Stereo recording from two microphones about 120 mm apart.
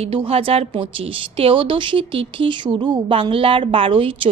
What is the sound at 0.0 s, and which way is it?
A woman's voice, 50° right (ahead or behind).